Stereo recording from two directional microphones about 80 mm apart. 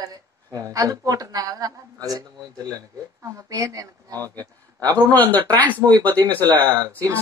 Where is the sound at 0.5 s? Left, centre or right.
Right.